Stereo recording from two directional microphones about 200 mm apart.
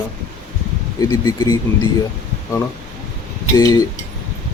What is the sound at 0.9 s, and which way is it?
Speech, 15° left (ahead or behind).